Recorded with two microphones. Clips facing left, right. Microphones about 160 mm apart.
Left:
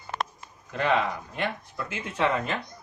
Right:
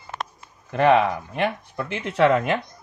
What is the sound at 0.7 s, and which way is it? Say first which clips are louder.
Speech: right 8 dB; 65° right (ahead or behind).